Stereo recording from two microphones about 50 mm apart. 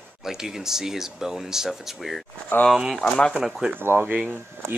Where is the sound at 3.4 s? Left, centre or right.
Centre.